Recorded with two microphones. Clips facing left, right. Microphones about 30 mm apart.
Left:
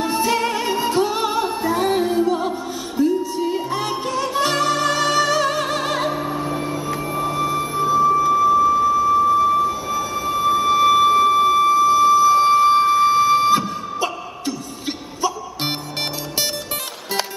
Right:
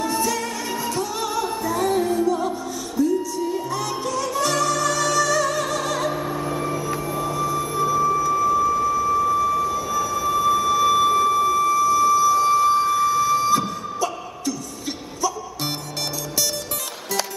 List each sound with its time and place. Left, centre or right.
0.0 s music: left
6.1 s vehicle: centre; by 7.6 s left
7.7 s a sound: left